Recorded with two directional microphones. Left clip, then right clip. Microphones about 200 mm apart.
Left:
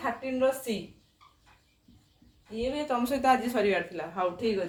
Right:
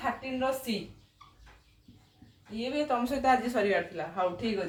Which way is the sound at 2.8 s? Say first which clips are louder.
Left 1 dB; 40° left (ahead or behind).